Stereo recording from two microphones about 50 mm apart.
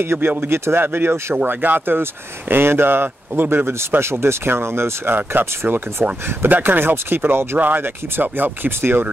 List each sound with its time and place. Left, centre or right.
0.0 s speech: right
1.3 s speech: right
6.0 s speech: right
6.5 s speech: right